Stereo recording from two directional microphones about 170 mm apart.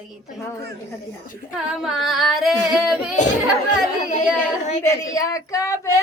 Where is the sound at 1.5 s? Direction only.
5° right (ahead or behind).